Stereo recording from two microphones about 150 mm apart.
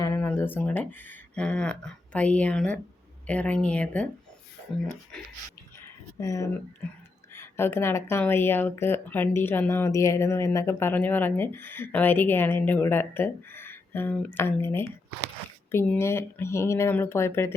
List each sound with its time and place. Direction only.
0.0 s speech: 15° left (ahead or behind)
6.1 s speech: 20° left (ahead or behind)